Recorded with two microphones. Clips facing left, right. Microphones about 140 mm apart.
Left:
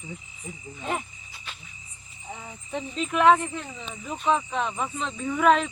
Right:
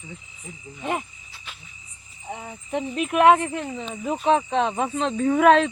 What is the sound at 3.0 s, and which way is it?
Speech, 60° right (ahead or behind).